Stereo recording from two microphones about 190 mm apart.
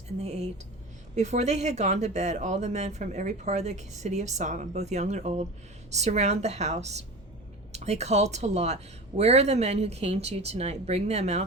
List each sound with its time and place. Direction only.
0.2 s speech: 35° right (ahead or behind)